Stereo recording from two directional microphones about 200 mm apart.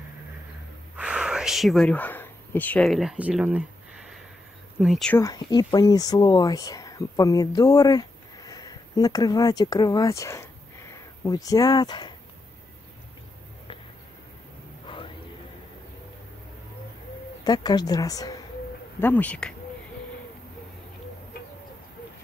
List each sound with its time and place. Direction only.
0.9 s speech: 5° right (ahead or behind)
4.7 s speech: centre (ahead or behind)
5.1 s speech: 15° left (ahead or behind)
14.9 s a sound: 25° left (ahead or behind)
17.5 s a woman's voice: 20° left (ahead or behind)